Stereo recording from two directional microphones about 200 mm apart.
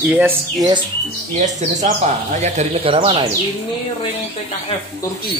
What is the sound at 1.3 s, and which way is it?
A man's voice, 35° right (ahead or behind).